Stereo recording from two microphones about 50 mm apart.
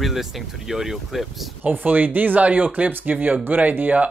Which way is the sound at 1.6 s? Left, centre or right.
Right.